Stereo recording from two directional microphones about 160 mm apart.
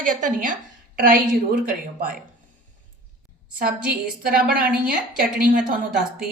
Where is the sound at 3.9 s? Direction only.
65° right (ahead or behind).